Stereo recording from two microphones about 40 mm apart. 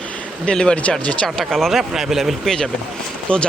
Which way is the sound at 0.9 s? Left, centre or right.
Left.